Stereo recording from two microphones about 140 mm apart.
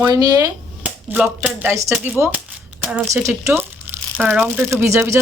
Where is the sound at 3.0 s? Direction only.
20° right (ahead or behind).